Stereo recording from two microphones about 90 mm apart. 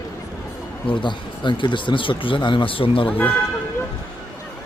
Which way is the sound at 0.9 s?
65° left (ahead or behind).